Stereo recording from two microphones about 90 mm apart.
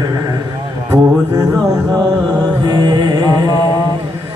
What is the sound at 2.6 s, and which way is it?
Music, 50° right (ahead or behind).